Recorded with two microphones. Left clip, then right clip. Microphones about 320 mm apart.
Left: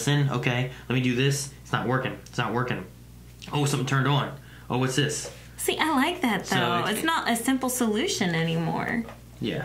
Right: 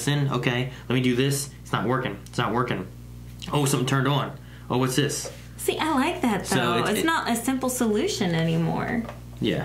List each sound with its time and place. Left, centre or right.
0.0 s speech: left
5.6 s a woman's voice: centre
6.4 s speech: left
6.9 s a woman's voice: centre